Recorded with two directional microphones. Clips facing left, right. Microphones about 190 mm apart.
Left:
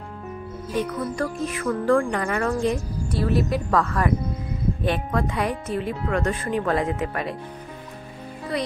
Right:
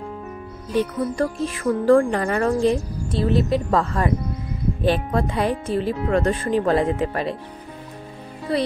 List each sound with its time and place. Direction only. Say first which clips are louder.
0.7 s speech: right 4 dB; 30° right (ahead or behind)
8.5 s speech: right 5 dB; 30° right (ahead or behind)